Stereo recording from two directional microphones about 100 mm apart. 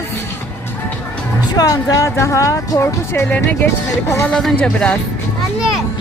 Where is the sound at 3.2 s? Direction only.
15° left (ahead or behind).